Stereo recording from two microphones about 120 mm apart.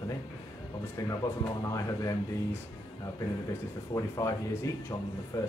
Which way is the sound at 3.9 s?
40° left (ahead or behind).